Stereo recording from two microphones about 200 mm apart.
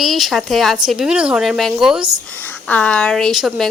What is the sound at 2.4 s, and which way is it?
A woman's voice, 10° left (ahead or behind).